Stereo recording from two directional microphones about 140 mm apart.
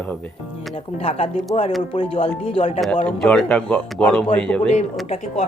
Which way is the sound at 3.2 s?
10° left (ahead or behind).